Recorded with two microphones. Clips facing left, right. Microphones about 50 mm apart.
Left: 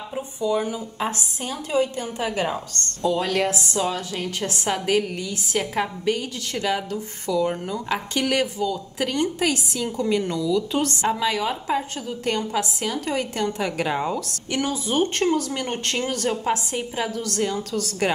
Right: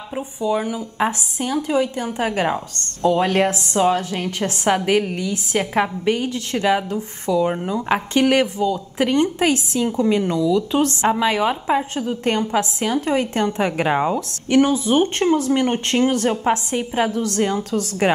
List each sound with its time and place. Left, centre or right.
0.1 s a woman's voice: right
7.9 s a woman's voice: right